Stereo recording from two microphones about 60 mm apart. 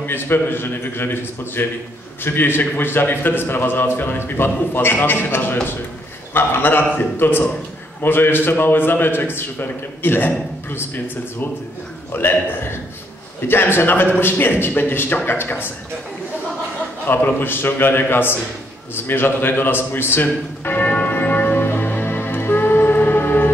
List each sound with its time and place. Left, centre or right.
0.0 s a man's voice: left
12.1 s a man's voice: left
17.1 s a man's voice: left
20.6 s church bell: left